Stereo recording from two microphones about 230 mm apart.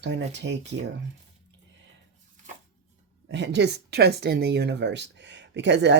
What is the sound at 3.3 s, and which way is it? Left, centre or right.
Speech, right.